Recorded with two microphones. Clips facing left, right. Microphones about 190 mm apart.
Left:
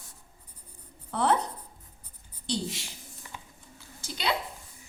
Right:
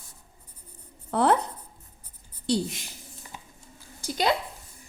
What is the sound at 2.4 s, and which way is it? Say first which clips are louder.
Speech: right 6 dB; 60° right (ahead or behind).